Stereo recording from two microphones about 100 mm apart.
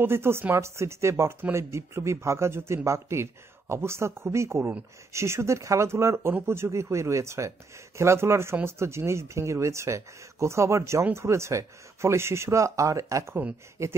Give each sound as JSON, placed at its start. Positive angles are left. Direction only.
{"t": 0.0, "sound": "speech", "side_deg": -25}